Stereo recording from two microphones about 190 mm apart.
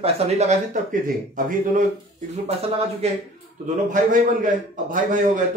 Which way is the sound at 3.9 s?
45° right (ahead or behind).